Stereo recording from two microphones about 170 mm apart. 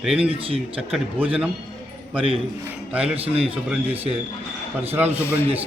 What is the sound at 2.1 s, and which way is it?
Speech, 30° right (ahead or behind).